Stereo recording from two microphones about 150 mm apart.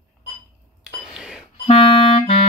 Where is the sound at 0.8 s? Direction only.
5° right (ahead or behind).